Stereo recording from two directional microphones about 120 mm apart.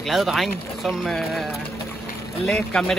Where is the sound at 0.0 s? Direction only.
Centre (ahead or behind).